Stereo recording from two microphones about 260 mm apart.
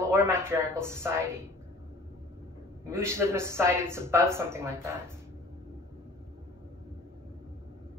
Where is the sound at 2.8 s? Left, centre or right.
Centre.